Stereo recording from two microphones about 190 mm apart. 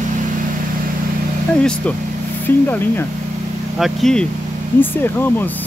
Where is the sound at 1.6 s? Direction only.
5° left (ahead or behind).